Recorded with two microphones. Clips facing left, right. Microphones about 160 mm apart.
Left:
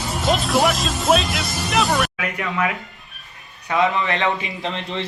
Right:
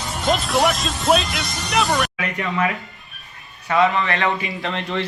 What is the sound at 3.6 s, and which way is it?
A man's voice, 20° left (ahead or behind).